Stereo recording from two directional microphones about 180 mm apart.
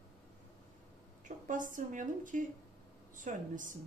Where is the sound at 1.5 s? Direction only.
45° right (ahead or behind).